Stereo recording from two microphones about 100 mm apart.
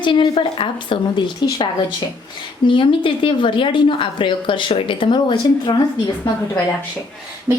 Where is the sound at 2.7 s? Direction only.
60° left (ahead or behind).